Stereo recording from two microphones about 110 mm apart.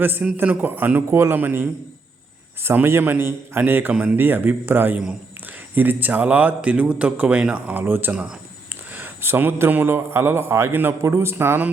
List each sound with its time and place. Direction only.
0.0 s a man's voice: 15° right (ahead or behind)